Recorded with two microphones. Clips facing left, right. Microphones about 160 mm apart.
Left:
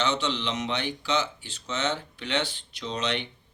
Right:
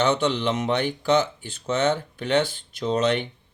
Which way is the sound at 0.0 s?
50° right (ahead or behind).